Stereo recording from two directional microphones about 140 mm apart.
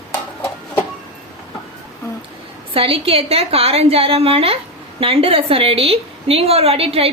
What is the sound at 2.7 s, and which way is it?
A woman's voice, 40° right (ahead or behind).